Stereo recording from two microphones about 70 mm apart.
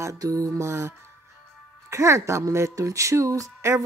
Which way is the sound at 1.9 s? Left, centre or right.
Right.